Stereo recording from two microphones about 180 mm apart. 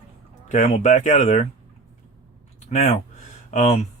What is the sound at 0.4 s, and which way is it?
Speech, 40° left (ahead or behind).